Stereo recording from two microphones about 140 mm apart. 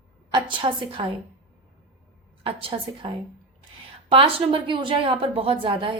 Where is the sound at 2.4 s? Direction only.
40° right (ahead or behind).